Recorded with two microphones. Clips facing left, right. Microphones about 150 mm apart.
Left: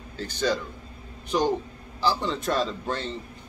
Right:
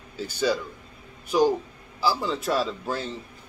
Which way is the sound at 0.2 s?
10° right (ahead or behind).